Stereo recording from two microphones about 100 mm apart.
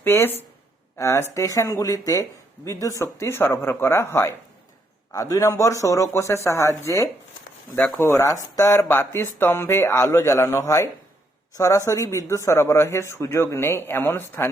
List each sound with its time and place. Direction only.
0.0 s speech: 25° left (ahead or behind)